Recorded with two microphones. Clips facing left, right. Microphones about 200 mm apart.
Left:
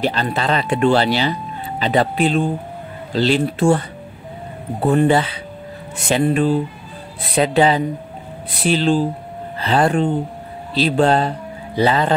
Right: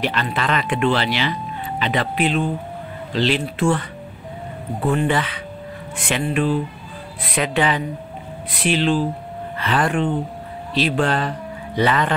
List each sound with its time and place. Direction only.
0.0 s speech: 40° left (ahead or behind)